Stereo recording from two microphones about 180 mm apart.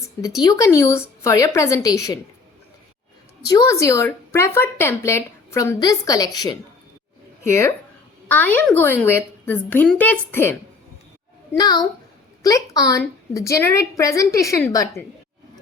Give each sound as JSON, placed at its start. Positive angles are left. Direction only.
{"t": 0.4, "sound": "a woman's voice", "side_deg": 20}
{"t": 3.4, "sound": "a woman's voice", "side_deg": 20}